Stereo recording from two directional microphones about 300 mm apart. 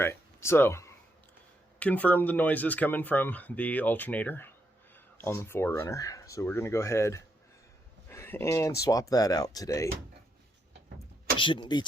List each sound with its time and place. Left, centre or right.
0.0 s a sound: centre
1.8 s speech: centre
11.3 s speech: centre